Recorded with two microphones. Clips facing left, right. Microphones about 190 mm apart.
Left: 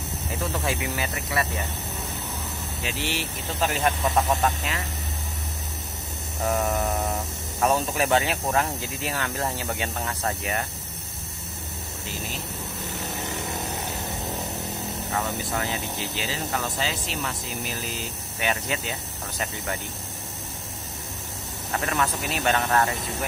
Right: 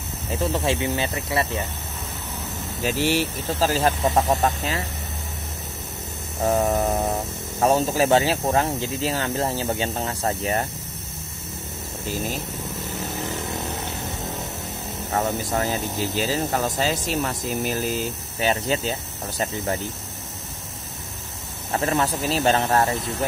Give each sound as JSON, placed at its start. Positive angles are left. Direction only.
{"t": 0.3, "sound": "speech", "side_deg": -25}
{"t": 2.8, "sound": "speech", "side_deg": -40}
{"t": 6.4, "sound": "speech", "side_deg": -25}
{"t": 15.0, "sound": "speech", "side_deg": -40}
{"t": 21.7, "sound": "speech", "side_deg": -30}